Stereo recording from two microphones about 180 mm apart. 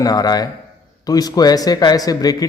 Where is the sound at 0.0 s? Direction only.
20° left (ahead or behind).